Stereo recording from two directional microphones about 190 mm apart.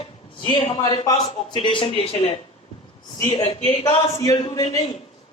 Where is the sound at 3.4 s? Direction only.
30° left (ahead or behind).